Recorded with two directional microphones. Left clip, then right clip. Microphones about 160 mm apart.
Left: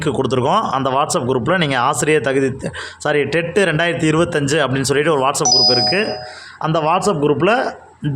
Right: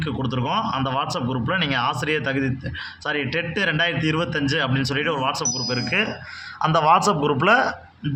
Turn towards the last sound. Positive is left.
turn(degrees=25)  # may be behind; listen again after turning